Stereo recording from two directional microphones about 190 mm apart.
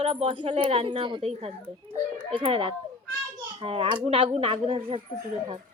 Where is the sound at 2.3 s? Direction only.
30° right (ahead or behind).